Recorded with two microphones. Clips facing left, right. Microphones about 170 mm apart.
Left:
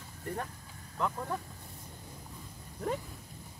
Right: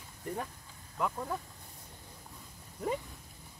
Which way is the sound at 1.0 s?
5° right (ahead or behind).